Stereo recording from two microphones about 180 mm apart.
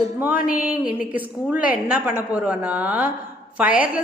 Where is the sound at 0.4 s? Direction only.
5° right (ahead or behind).